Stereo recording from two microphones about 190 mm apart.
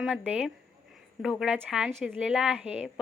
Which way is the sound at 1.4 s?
5° right (ahead or behind).